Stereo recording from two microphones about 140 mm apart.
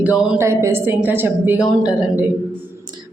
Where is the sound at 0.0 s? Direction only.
10° right (ahead or behind).